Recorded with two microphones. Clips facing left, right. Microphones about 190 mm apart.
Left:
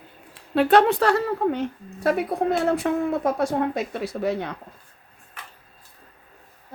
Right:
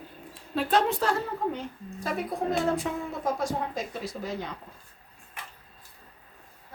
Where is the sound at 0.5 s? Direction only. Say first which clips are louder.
Left 8 dB; 70° left (ahead or behind).